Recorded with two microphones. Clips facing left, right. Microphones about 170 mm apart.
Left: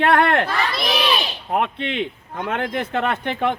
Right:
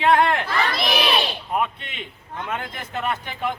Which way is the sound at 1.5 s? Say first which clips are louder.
Left 3 dB; 60° left (ahead or behind).